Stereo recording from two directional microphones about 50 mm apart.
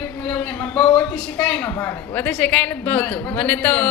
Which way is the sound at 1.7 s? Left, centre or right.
Left.